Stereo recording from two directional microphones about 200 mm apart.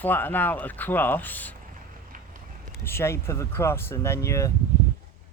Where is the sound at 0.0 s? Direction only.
10° left (ahead or behind).